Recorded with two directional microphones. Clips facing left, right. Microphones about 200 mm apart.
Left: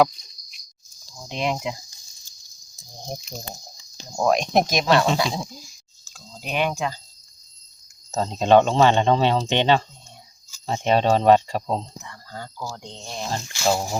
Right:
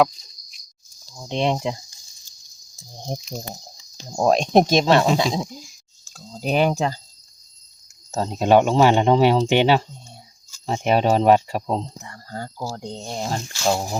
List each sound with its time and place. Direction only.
1.3 s speech: 30° right (ahead or behind)
3.1 s speech: 30° right (ahead or behind)
6.1 s speech: 40° right (ahead or behind)
8.1 s speech: 10° right (ahead or behind)
12.0 s speech: 45° right (ahead or behind)
13.3 s speech: centre (ahead or behind)